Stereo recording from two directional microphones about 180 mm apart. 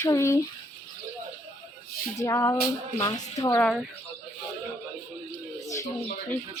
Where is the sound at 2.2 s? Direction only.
20° left (ahead or behind).